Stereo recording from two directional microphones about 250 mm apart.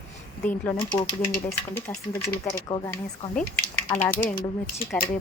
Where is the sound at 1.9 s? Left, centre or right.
Centre.